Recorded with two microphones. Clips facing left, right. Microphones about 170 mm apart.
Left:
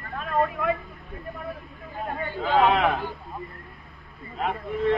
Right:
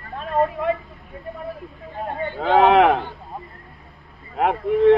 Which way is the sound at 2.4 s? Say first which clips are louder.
Right 6 dB; 65° right (ahead or behind).